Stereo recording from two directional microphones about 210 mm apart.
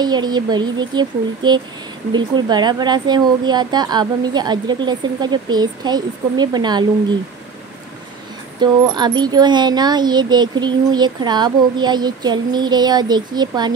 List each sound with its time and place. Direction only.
0.0 s speech: 20° right (ahead or behind)
8.5 s speech: 20° right (ahead or behind)